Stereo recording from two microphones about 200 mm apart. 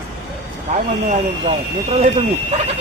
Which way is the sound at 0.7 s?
35° right (ahead or behind).